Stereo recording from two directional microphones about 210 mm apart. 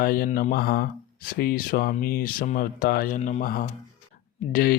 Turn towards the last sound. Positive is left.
turn(degrees=45)  # may be behind; listen again after turning